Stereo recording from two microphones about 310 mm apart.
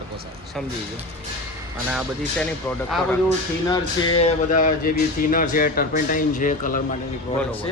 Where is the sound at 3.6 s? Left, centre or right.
Centre.